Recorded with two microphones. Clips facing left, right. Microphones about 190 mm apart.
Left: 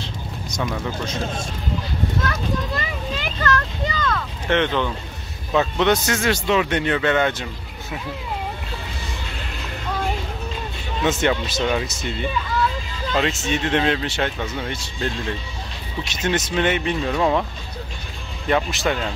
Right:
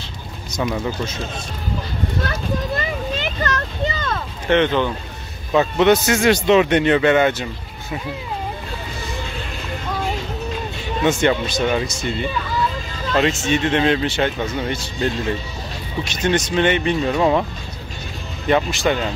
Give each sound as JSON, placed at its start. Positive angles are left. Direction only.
{"t": 0.5, "sound": "speech", "side_deg": -5}
{"t": 3.2, "sound": "a sound", "side_deg": -20}
{"t": 4.5, "sound": "speech", "side_deg": 0}
{"t": 11.0, "sound": "speech", "side_deg": 0}
{"t": 18.5, "sound": "speech", "side_deg": 0}